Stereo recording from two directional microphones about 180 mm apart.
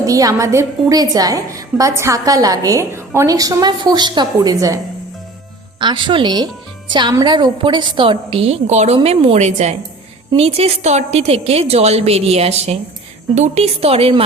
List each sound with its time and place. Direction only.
0.0 s a woman's voice: 20° right (ahead or behind)
5.8 s a woman's voice: 25° right (ahead or behind)